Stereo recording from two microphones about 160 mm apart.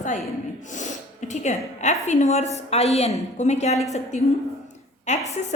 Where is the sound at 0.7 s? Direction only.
50° left (ahead or behind).